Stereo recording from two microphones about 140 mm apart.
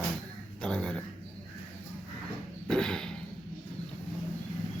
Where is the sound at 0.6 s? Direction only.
5° left (ahead or behind).